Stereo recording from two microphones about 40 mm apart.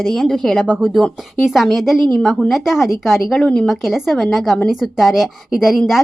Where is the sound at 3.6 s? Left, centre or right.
Centre.